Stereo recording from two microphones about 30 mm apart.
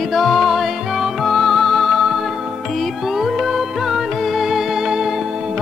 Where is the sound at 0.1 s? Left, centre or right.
Centre.